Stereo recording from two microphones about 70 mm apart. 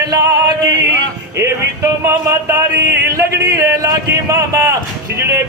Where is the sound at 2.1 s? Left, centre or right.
Right.